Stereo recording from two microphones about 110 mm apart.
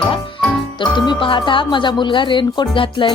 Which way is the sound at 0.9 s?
45° left (ahead or behind).